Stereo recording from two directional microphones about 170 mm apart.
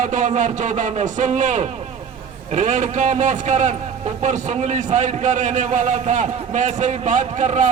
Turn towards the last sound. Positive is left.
turn(degrees=-45)  # may be behind; listen again after turning